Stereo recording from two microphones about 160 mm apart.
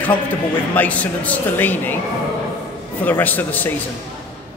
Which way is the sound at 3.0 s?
10° left (ahead or behind).